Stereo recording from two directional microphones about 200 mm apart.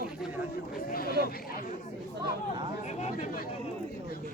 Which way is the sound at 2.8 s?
35° left (ahead or behind).